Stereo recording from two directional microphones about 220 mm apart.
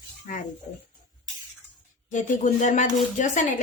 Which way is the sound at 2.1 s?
35° left (ahead or behind).